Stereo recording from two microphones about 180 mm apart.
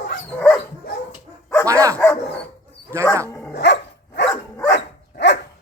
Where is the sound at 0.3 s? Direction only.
10° left (ahead or behind).